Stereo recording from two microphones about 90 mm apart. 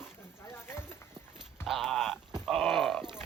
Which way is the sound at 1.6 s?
Centre (ahead or behind).